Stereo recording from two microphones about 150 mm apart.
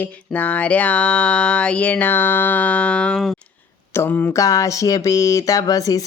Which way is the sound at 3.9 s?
15° left (ahead or behind).